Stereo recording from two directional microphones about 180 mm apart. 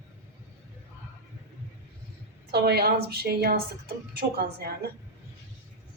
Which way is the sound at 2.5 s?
60° right (ahead or behind).